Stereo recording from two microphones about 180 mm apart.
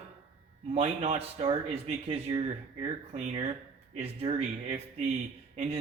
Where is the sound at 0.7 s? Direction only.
35° right (ahead or behind).